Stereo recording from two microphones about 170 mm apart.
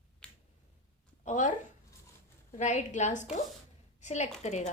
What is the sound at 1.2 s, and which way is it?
Speech, 45° left (ahead or behind).